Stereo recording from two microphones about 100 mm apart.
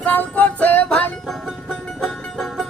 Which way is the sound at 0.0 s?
15° left (ahead or behind).